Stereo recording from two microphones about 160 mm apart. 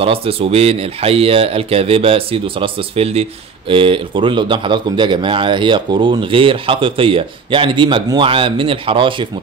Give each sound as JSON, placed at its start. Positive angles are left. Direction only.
{"t": 0.0, "sound": "speech", "side_deg": -35}